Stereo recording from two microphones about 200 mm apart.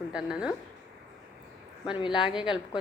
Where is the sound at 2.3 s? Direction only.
5° right (ahead or behind).